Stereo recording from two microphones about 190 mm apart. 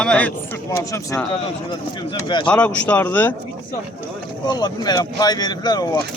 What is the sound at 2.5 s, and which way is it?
Speech, 10° left (ahead or behind).